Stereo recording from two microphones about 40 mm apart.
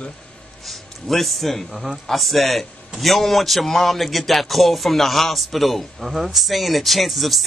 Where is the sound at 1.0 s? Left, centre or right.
Centre.